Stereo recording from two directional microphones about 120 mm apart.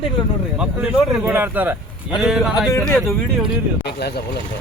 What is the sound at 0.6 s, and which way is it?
Speech, 15° right (ahead or behind).